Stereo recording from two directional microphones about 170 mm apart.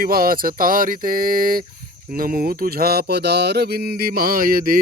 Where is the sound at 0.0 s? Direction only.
60° right (ahead or behind).